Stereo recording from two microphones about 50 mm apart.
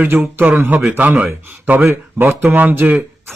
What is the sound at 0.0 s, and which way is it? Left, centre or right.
A man's voice, right.